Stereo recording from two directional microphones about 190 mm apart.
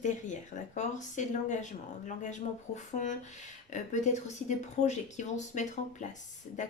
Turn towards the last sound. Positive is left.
turn(degrees=40)  # may be behind; listen again after turning